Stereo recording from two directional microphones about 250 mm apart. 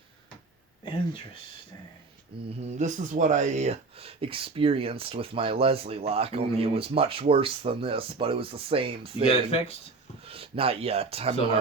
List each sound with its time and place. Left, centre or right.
2.6 s speech: right
9.2 s speech: left
10.2 s speech: right